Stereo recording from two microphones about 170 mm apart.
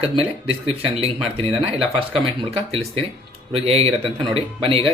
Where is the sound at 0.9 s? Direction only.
35° right (ahead or behind).